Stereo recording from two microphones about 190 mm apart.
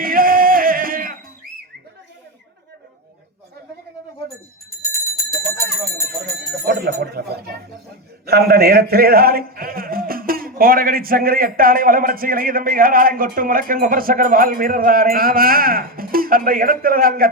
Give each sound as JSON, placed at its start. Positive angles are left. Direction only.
{"t": 0.0, "sound": "music", "side_deg": -50}
{"t": 5.5, "sound": "bell", "side_deg": 15}
{"t": 6.2, "sound": "a sound", "side_deg": -55}
{"t": 8.3, "sound": "a man's voice", "side_deg": -55}